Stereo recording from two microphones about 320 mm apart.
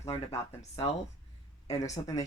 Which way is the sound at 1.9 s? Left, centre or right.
Centre.